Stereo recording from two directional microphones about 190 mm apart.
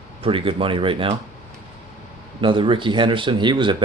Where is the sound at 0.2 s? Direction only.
30° right (ahead or behind).